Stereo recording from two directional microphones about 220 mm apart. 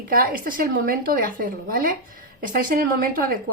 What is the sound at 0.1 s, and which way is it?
Speech, 40° right (ahead or behind).